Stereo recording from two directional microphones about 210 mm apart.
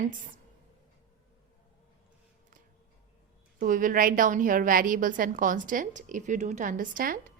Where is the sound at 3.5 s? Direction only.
40° right (ahead or behind).